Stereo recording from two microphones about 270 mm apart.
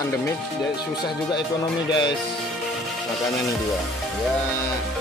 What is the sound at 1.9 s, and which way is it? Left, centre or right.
Speech, centre.